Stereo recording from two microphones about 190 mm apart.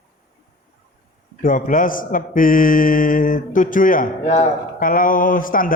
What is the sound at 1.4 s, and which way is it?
A man's voice, 45° left (ahead or behind).